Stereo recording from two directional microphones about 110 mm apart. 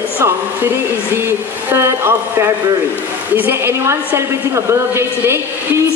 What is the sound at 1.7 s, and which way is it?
A woman's voice, 20° right (ahead or behind).